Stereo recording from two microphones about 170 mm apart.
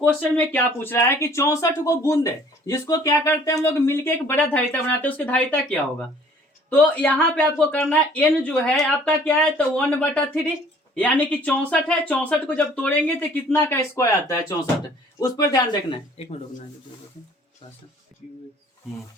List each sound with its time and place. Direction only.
0.0 s speech: 10° left (ahead or behind)
16.1 s speech: 40° left (ahead or behind)